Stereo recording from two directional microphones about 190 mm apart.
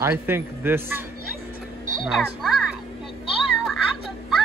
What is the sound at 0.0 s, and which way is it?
Speech, 10° right (ahead or behind).